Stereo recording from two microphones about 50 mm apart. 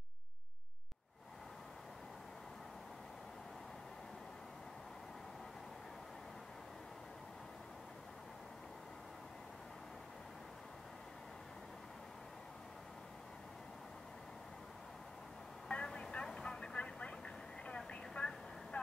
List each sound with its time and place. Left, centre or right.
15.7 s vehicle: centre